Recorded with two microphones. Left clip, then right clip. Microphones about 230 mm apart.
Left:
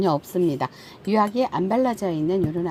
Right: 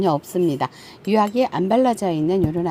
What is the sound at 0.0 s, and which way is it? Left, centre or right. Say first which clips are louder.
Speech: right 2 dB; centre.